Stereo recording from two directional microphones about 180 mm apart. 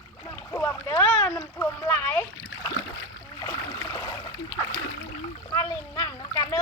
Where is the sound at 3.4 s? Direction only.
15° left (ahead or behind).